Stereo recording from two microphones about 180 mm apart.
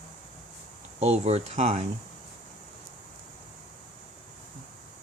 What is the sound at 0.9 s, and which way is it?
Speech, 35° right (ahead or behind).